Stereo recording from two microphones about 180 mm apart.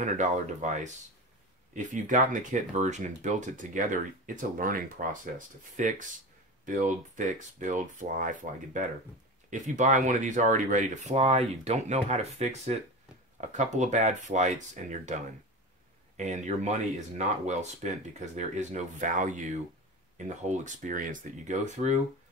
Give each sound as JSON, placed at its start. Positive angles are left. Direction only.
{"t": 0.0, "sound": "speech", "side_deg": -45}
{"t": 16.2, "sound": "speech", "side_deg": -40}